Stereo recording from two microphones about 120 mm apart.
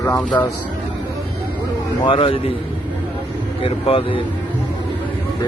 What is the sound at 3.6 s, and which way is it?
Speech, 50° left (ahead or behind).